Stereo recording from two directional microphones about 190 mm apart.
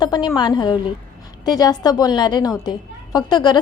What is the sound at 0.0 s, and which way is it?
A woman's voice, 25° left (ahead or behind).